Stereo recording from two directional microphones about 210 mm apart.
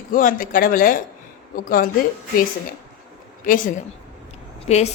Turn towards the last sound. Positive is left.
turn(degrees=30)  # may be behind; listen again after turning